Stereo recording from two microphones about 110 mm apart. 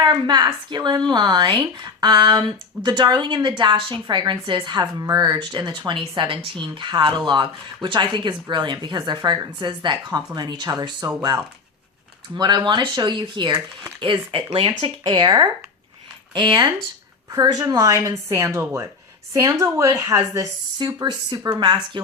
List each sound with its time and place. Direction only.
0.0 s a woman's voice: 40° right (ahead or behind)
12.3 s a woman's voice: 40° right (ahead or behind)